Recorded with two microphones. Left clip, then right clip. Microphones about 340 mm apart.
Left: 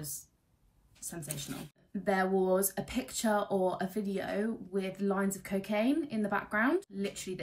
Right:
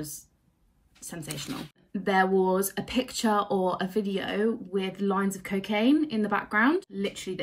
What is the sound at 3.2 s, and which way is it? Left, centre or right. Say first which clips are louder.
Speech: right 3 dB; right.